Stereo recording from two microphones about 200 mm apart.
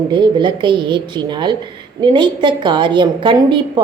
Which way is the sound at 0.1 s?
25° right (ahead or behind).